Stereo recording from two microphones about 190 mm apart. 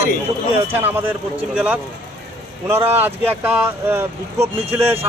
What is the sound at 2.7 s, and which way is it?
Speech, 10° right (ahead or behind).